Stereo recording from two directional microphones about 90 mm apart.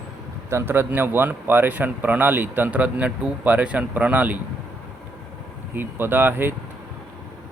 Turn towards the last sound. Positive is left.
turn(degrees=-20)  # may be behind; listen again after turning